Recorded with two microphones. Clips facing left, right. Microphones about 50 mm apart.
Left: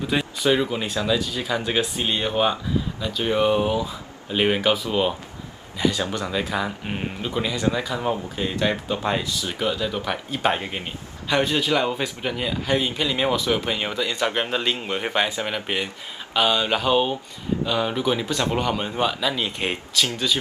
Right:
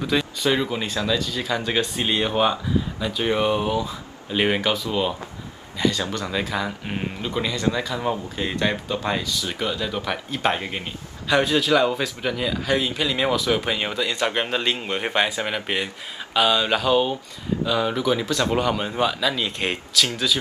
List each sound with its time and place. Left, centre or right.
0.0 s a man's voice: centre
2.0 s a man's voice: centre
5.8 s a man's voice: centre
6.3 s a man's voice: centre
8.9 s a man's voice: centre
9.4 s a man's voice: centre
13.6 s a man's voice: centre
18.5 s a man's voice: centre